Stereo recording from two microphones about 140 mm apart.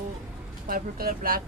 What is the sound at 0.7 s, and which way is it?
Speech, 90° right.